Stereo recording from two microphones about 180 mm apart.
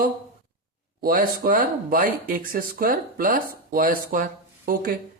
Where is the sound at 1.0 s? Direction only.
50° right (ahead or behind).